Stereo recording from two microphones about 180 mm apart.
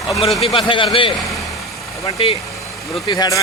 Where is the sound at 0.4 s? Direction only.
30° left (ahead or behind).